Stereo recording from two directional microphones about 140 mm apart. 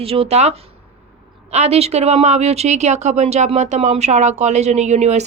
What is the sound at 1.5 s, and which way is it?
A woman's voice, 50° right (ahead or behind).